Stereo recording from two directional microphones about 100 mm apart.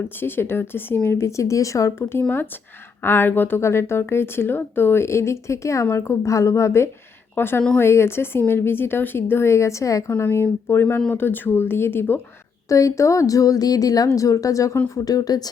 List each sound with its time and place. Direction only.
0.2 s speech: 20° left (ahead or behind)
12.6 s a woman's voice: 35° left (ahead or behind)